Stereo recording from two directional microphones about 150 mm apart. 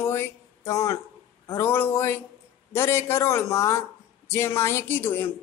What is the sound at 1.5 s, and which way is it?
A woman's voice, 15° left (ahead or behind).